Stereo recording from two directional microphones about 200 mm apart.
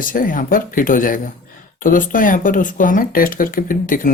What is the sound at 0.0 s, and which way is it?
Speech, 45° left (ahead or behind).